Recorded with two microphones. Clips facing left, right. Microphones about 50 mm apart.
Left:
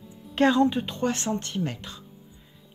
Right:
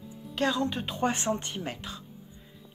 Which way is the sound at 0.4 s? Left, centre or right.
Left.